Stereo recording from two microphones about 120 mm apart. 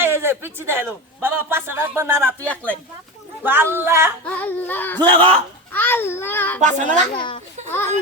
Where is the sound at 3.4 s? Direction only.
20° right (ahead or behind).